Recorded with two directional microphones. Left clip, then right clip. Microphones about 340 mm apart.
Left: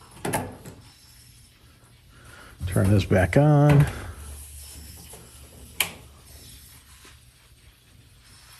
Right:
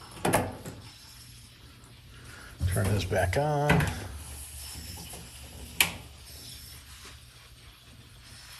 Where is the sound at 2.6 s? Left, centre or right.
Centre.